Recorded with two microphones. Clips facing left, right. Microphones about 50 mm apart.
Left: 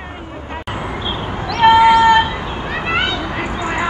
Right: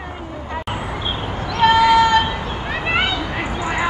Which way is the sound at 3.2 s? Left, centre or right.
Left.